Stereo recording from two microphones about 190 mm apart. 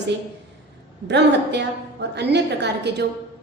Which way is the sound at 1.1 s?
65° right (ahead or behind).